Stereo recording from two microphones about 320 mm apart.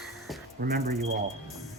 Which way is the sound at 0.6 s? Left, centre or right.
Right.